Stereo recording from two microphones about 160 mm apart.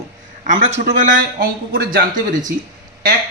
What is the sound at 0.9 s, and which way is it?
Speech, 55° right (ahead or behind).